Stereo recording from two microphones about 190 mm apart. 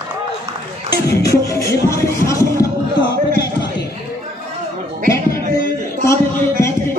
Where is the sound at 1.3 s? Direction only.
15° left (ahead or behind).